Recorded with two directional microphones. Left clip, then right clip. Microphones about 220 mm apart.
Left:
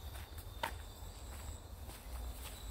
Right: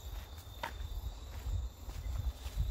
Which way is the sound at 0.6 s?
Centre (ahead or behind).